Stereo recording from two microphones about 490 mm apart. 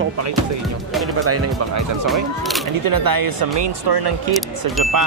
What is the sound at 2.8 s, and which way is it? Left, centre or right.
Speech, right.